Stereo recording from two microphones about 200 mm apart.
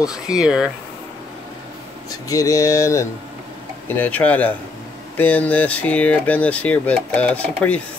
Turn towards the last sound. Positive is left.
turn(degrees=5)  # may be behind; listen again after turning